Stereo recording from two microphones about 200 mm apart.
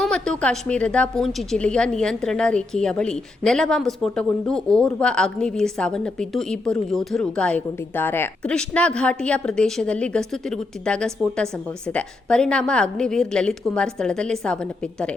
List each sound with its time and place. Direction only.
0.0 s a woman's voice: 5° left (ahead or behind)